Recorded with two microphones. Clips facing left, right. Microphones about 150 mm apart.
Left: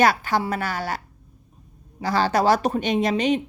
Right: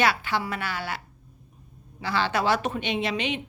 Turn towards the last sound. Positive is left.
turn(degrees=40)  # may be behind; listen again after turning